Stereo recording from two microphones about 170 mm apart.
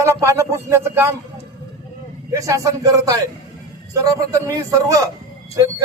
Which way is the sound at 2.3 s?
20° right (ahead or behind).